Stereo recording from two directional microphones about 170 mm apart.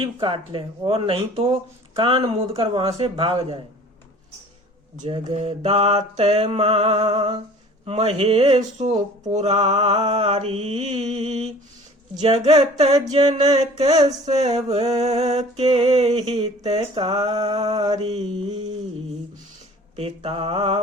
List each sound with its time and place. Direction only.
0.0 s mantra: 30° right (ahead or behind)
5.0 s mantra: 35° right (ahead or behind)
15.6 s mantra: 30° right (ahead or behind)
20.0 s mantra: 35° right (ahead or behind)